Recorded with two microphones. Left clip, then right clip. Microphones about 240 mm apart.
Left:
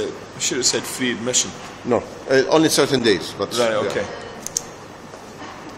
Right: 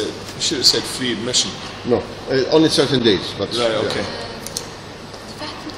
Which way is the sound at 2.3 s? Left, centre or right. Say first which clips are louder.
Right 1 dB; centre.